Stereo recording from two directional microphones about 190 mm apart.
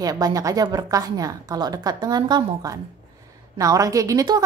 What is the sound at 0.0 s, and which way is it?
A woman's voice, 20° right (ahead or behind).